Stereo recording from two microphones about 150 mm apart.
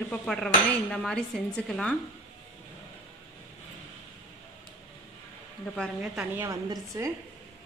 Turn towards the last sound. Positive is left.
turn(degrees=-20)  # may be behind; listen again after turning